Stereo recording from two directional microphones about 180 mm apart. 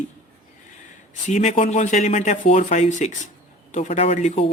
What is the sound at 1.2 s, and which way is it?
Speech, 40° left (ahead or behind).